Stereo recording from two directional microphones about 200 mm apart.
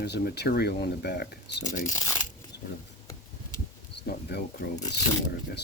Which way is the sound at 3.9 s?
55° left (ahead or behind).